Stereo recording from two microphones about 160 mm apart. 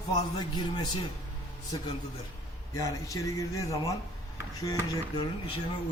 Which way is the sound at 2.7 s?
20° left (ahead or behind).